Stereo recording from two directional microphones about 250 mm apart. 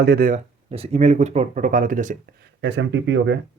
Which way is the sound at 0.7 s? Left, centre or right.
Right.